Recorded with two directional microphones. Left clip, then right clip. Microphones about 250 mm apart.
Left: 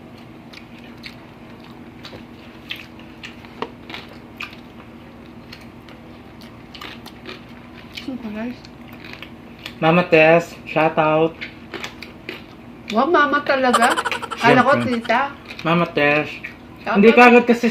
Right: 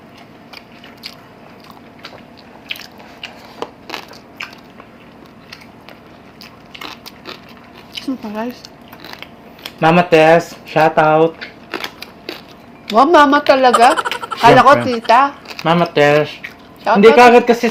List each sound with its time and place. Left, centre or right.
9.8 s speech: right
12.9 s speech: right
13.7 s a sound: centre
14.4 s speech: right